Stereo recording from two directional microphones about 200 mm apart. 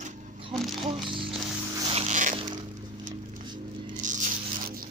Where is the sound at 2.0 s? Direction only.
35° right (ahead or behind).